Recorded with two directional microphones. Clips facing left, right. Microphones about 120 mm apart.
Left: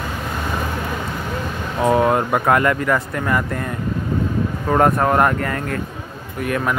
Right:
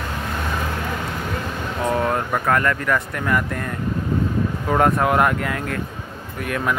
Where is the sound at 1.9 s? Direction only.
15° left (ahead or behind).